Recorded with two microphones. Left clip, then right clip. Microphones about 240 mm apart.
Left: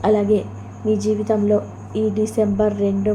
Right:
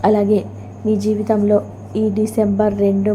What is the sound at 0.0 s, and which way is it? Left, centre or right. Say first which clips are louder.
A woman's voice: right 2 dB; centre.